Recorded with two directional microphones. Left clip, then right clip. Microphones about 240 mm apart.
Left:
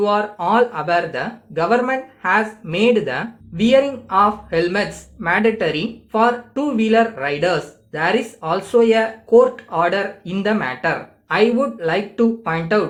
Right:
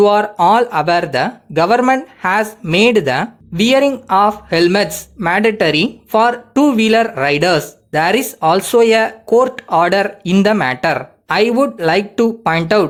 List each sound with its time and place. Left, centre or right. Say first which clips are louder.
0.0 s speech: right 8 dB; right